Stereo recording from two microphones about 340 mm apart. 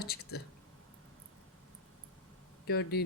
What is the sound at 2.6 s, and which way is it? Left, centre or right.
Speech, left.